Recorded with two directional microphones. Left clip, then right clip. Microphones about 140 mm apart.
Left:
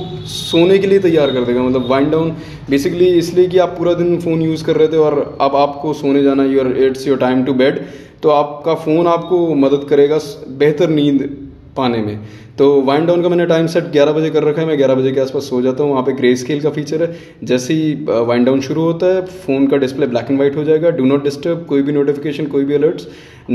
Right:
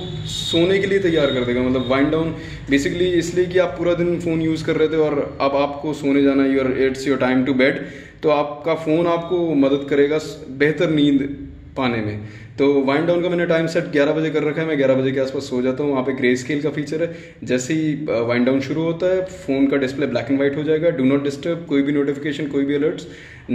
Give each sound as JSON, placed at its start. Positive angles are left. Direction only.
{"t": 0.3, "sound": "a man's voice", "side_deg": 35}